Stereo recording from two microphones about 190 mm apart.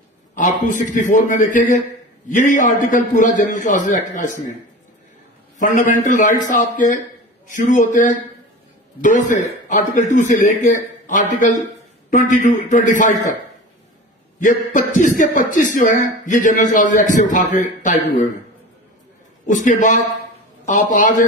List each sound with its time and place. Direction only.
0.7 s speech: 40° left (ahead or behind)
5.6 s a man's voice: 40° left (ahead or behind)
9.7 s a man's voice: 40° left (ahead or behind)
14.4 s a man's voice: 40° left (ahead or behind)
19.4 s a man's voice: 40° left (ahead or behind)